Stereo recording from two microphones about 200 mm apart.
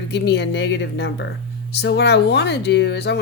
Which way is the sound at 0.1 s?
60° left (ahead or behind).